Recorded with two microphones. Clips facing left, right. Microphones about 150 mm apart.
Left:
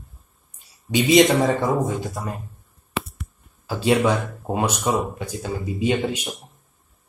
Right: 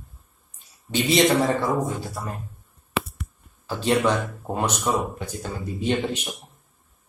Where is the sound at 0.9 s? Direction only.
15° left (ahead or behind).